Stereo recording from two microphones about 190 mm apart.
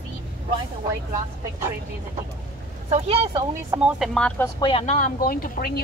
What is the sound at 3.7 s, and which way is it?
Speech, 5° right (ahead or behind).